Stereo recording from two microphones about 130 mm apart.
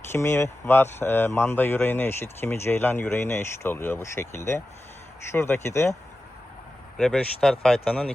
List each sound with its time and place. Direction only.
0.1 s speech: 20° left (ahead or behind)
6.9 s speech: 5° left (ahead or behind)